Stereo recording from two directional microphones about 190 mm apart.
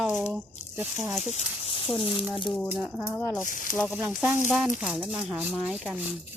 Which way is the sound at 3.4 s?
45° left (ahead or behind).